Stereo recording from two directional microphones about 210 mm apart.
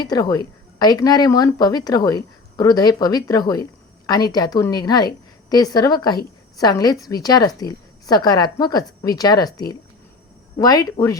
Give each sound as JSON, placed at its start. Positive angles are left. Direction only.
{"t": 0.0, "sound": "speech", "side_deg": 20}
{"t": 10.6, "sound": "speech", "side_deg": 20}